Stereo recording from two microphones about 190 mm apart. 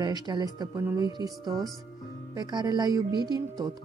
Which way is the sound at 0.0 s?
20° right (ahead or behind).